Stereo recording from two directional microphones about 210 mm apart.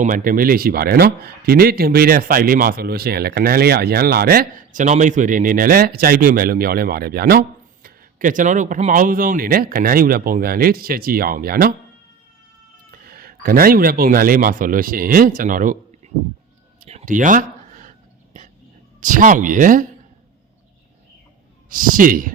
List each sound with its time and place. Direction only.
0.0 s speech: 40° right (ahead or behind)
12.9 s speech: 45° right (ahead or behind)
16.9 s a sound: 35° right (ahead or behind)
18.9 s speech: 40° right (ahead or behind)
21.7 s speech: 40° right (ahead or behind)